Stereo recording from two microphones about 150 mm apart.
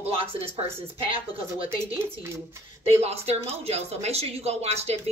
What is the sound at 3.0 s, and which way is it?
Speech, 45° right (ahead or behind).